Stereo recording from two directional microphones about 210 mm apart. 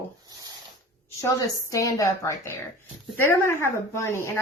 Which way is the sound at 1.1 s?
15° left (ahead or behind).